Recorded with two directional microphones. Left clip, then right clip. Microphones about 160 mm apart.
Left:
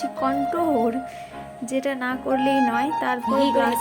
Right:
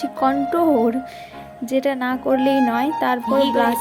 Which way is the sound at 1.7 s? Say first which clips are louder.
Right 5 dB; 30° right (ahead or behind).